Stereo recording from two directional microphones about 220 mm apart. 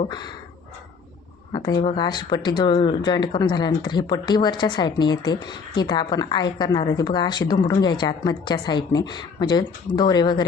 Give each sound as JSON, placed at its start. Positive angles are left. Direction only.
{"t": 1.5, "sound": "speech", "side_deg": 20}